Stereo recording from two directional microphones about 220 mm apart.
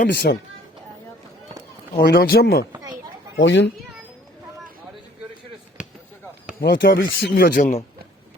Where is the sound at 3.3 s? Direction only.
55° left (ahead or behind).